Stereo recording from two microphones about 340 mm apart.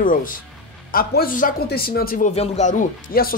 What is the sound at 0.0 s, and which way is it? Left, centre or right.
Speech, left.